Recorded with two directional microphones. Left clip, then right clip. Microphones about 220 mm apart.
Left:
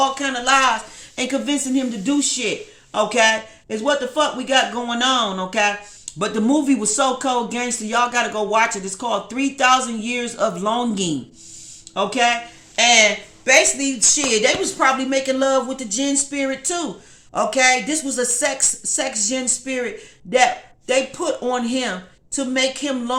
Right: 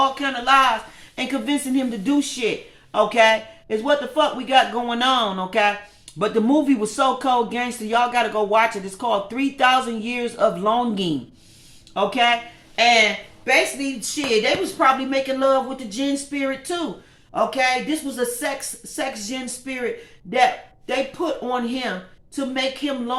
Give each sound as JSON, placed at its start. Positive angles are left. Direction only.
{"t": 0.1, "sound": "speech", "side_deg": 20}
{"t": 1.1, "sound": "speech", "side_deg": 15}
{"t": 12.8, "sound": "speech", "side_deg": 25}